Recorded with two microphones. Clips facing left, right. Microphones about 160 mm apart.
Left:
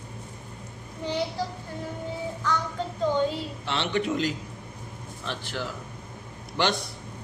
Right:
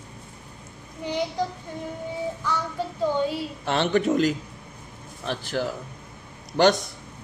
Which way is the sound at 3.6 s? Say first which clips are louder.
Right 6 dB; 50° right (ahead or behind).